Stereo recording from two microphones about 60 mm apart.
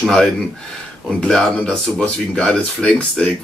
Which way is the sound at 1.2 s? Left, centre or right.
Centre.